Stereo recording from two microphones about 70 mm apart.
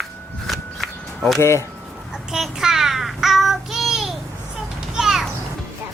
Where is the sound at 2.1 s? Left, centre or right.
Centre.